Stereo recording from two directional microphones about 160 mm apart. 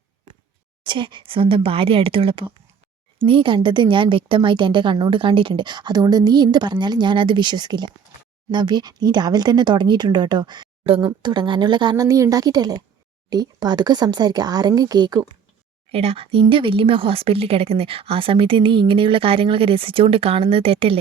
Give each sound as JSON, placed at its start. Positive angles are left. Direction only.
{"t": 0.9, "sound": "a woman's voice", "side_deg": -30}
{"t": 15.9, "sound": "speech", "side_deg": -40}